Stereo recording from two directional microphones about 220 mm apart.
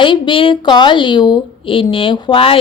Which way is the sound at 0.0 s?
20° left (ahead or behind).